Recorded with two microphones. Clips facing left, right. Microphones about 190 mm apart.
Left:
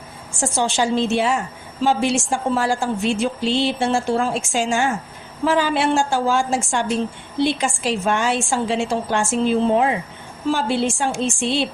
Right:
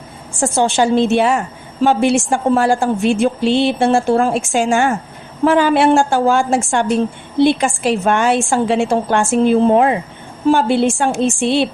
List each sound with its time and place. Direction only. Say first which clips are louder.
0.3 s a woman's voice: right 6 dB; 55° right (ahead or behind)